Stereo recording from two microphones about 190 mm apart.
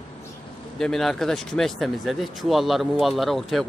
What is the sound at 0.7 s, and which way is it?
Speech, centre (ahead or behind).